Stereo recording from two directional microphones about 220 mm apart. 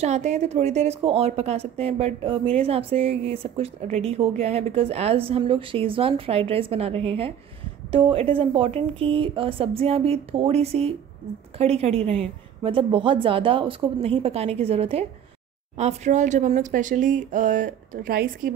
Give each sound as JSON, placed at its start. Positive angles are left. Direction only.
{"t": 0.0, "sound": "a woman's voice", "side_deg": -30}